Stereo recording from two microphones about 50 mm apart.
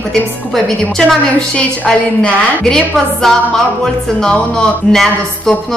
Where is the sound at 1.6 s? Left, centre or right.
Left.